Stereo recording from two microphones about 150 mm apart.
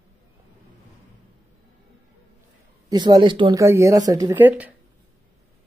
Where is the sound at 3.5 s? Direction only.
20° right (ahead or behind).